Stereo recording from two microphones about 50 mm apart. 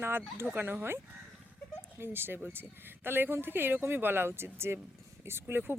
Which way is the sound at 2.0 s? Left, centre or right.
Right.